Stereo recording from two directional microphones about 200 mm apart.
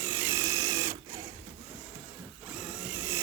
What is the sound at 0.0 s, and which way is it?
Sewing machine, 10° right (ahead or behind).